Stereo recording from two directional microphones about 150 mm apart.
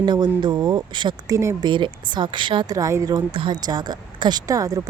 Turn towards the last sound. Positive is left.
turn(degrees=-25)  # may be behind; listen again after turning